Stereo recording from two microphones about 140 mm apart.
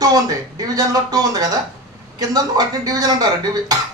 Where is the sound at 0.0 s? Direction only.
30° right (ahead or behind).